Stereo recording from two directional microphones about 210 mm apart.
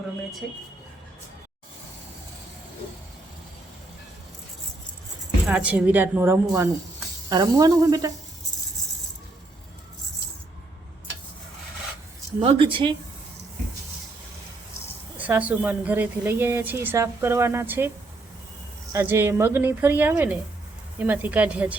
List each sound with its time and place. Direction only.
5.5 s a woman's voice: 5° right (ahead or behind)
12.4 s speech: 25° right (ahead or behind)
15.2 s a woman's voice: 5° right (ahead or behind)
18.9 s a woman's voice: 10° right (ahead or behind)